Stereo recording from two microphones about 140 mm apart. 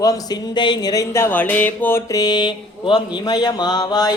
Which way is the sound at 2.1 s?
30° left (ahead or behind).